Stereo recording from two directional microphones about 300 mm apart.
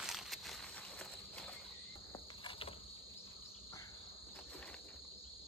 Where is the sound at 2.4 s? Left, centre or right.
Centre.